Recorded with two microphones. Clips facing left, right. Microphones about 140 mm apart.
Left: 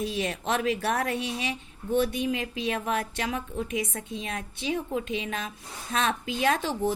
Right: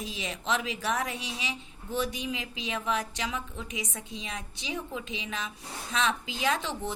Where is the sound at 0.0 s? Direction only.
55° left (ahead or behind).